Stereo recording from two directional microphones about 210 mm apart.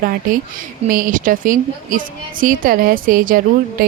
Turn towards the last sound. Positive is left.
turn(degrees=-40)  # may be behind; listen again after turning